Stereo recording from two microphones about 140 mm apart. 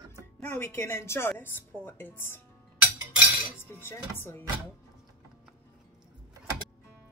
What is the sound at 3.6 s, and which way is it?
Speech, 15° left (ahead or behind).